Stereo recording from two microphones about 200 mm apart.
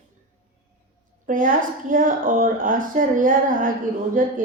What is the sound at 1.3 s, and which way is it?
A woman's voice, 45° right (ahead or behind).